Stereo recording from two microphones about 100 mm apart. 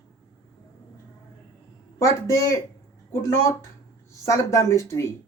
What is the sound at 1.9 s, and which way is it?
Speech, 30° left (ahead or behind).